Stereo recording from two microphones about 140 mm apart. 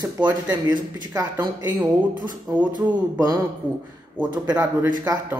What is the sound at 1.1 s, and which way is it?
Speech, 25° right (ahead or behind).